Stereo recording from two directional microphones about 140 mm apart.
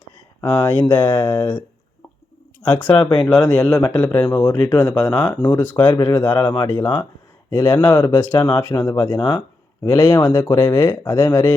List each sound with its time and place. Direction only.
0.4 s speech: 30° left (ahead or behind)
2.6 s speech: 15° left (ahead or behind)
2.9 s speech: 35° left (ahead or behind)
3.5 s speech: 5° left (ahead or behind)
5.7 s speech: 30° left (ahead or behind)